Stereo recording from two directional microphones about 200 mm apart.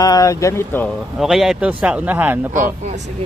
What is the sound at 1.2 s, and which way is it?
Speech, centre (ahead or behind).